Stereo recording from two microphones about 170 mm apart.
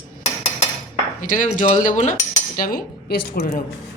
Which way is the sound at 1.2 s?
50° left (ahead or behind).